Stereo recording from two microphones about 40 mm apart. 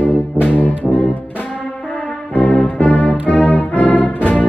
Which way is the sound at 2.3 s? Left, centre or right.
Left.